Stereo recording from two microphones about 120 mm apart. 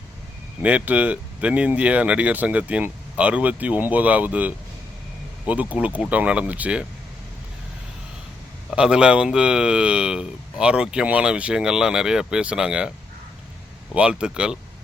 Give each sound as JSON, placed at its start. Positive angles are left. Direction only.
{"t": 0.6, "sound": "speech", "side_deg": -10}
{"t": 8.7, "sound": "speech", "side_deg": -10}
{"t": 13.9, "sound": "speech", "side_deg": -10}